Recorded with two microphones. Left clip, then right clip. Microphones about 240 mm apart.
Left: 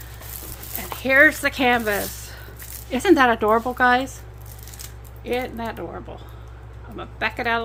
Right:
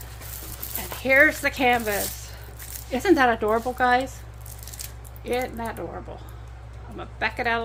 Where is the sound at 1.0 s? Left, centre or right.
Centre.